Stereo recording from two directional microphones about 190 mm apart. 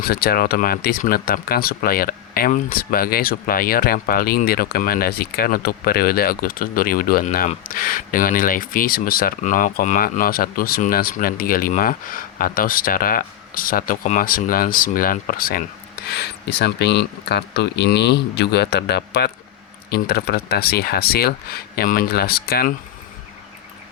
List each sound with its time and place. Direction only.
0.0 s speech: 50° left (ahead or behind)